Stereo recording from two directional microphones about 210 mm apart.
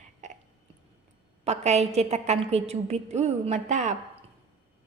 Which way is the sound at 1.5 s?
30° right (ahead or behind).